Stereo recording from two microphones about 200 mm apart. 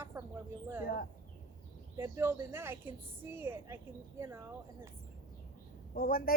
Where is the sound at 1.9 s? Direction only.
15° right (ahead or behind).